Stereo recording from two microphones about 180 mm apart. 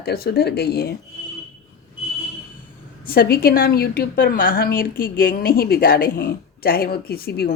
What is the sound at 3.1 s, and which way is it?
A woman's voice, 55° left (ahead or behind).